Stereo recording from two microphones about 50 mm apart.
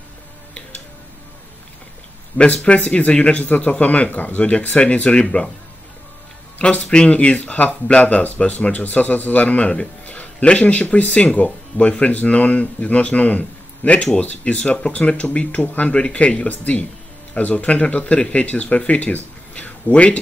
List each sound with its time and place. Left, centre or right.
2.3 s speech: left
6.6 s speech: left
15.9 s speech: left